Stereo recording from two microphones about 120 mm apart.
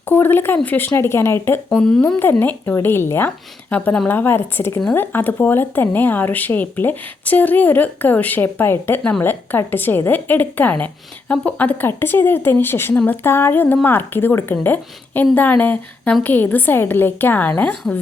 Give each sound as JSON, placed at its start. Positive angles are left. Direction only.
{"t": 0.0, "sound": "speech", "side_deg": 20}
{"t": 1.7, "sound": "speech", "side_deg": 5}
{"t": 2.0, "sound": "speech", "side_deg": 20}
{"t": 4.1, "sound": "speech", "side_deg": 20}